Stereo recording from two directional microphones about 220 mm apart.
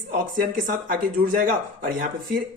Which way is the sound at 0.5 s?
40° right (ahead or behind).